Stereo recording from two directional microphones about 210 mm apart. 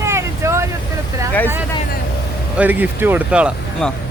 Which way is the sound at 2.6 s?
10° right (ahead or behind).